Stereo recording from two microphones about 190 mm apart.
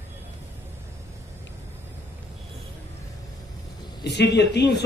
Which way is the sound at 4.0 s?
60° left (ahead or behind).